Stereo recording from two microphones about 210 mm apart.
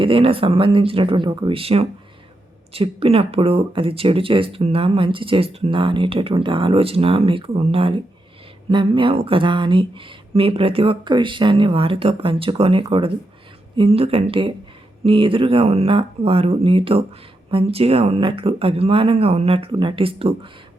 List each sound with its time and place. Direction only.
0.0 s speech: 25° right (ahead or behind)